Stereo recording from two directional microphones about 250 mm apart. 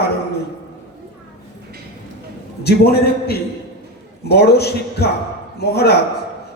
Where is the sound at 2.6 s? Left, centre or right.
Left.